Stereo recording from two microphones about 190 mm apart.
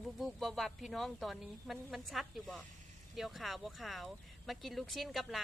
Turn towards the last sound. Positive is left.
turn(degrees=0)  # may be behind; listen again after turning